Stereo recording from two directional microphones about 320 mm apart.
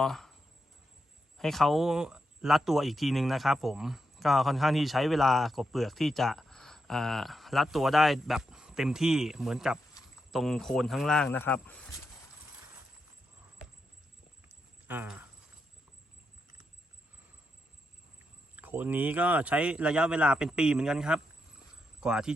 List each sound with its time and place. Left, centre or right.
0.0 s speech: centre
1.4 s speech: centre
14.4 s a sound: centre
18.5 s speech: centre